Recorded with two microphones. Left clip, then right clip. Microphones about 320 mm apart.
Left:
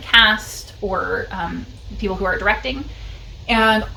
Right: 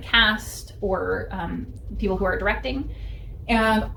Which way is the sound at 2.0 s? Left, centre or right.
Centre.